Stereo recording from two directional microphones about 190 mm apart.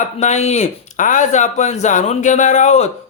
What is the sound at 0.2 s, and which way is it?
Speech, 35° left (ahead or behind).